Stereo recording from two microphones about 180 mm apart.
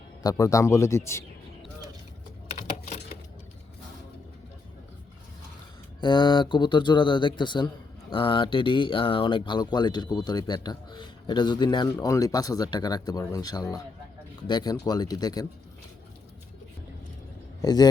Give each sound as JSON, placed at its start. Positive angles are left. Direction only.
{"t": 0.2, "sound": "speech", "side_deg": 20}
{"t": 2.5, "sound": "typing", "side_deg": 40}
{"t": 6.0, "sound": "speech", "side_deg": 25}
{"t": 17.6, "sound": "a man's voice", "side_deg": 20}